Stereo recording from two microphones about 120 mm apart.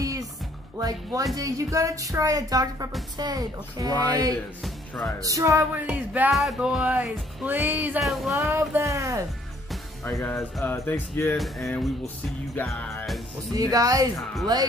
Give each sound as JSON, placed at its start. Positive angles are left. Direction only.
{"t": 0.0, "sound": "music", "side_deg": -30}
{"t": 0.7, "sound": "speech", "side_deg": -30}
{"t": 5.2, "sound": "music", "side_deg": -25}
{"t": 8.0, "sound": "music", "side_deg": 0}
{"t": 8.4, "sound": "speech", "side_deg": -20}
{"t": 10.0, "sound": "music", "side_deg": 20}
{"t": 11.3, "sound": "music", "side_deg": 0}
{"t": 13.5, "sound": "speech", "side_deg": -30}